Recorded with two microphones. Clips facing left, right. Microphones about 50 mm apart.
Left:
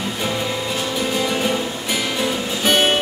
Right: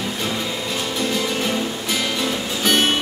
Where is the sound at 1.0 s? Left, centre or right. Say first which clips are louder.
Left 1 dB; centre.